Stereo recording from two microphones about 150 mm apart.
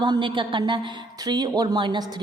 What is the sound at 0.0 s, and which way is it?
A woman's voice, 30° right (ahead or behind).